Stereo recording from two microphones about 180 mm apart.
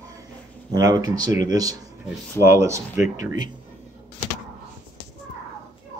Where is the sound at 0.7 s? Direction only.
20° right (ahead or behind).